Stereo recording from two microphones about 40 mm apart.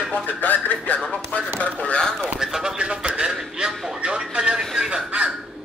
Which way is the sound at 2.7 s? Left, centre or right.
Right.